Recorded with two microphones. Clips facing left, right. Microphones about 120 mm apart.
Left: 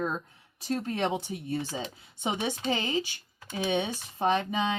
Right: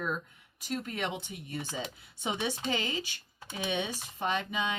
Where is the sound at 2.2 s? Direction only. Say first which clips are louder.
Left 3 dB; 20° left (ahead or behind).